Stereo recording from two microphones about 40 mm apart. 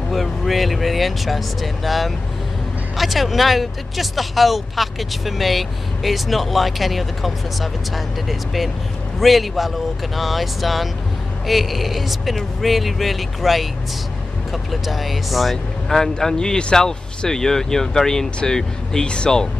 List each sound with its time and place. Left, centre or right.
0.1 s speech: centre
15.5 s speech: centre